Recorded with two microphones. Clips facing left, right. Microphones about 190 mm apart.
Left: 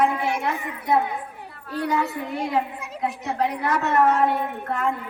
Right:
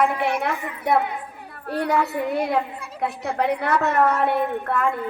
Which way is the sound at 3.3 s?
65° right (ahead or behind).